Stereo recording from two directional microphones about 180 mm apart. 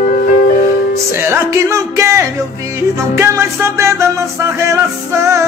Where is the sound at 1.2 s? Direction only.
15° right (ahead or behind).